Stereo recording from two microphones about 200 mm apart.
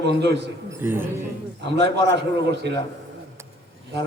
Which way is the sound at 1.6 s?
60° right (ahead or behind).